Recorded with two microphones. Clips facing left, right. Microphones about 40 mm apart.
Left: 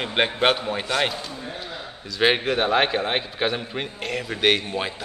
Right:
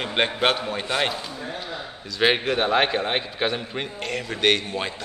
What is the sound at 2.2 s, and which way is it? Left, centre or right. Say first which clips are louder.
A man's voice: even; centre.